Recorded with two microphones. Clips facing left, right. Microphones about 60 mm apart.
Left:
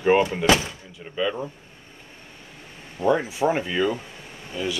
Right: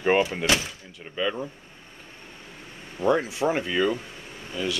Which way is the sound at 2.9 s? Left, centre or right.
Centre.